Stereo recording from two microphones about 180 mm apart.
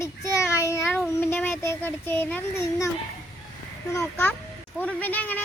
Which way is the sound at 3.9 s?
15° left (ahead or behind).